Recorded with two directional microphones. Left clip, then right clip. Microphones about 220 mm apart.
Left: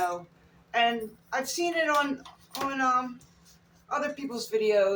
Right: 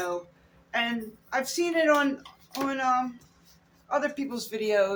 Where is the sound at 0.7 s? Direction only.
30° right (ahead or behind).